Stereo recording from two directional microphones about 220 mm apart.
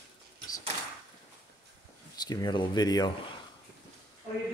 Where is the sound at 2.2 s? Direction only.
20° left (ahead or behind).